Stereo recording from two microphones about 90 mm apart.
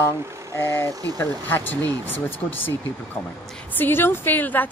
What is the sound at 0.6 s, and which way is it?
A woman's voice, 25° left (ahead or behind).